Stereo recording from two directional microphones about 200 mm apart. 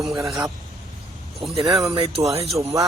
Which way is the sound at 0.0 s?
Centre (ahead or behind).